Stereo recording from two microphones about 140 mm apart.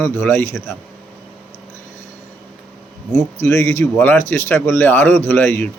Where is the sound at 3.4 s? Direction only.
20° left (ahead or behind).